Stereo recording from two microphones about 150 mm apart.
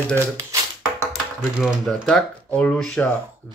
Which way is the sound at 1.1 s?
Centre (ahead or behind).